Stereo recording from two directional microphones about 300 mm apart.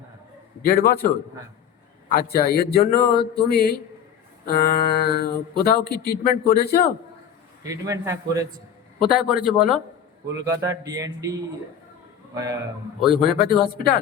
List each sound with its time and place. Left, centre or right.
0.6 s a man's voice: left
7.6 s speech: centre
13.4 s a man's voice: left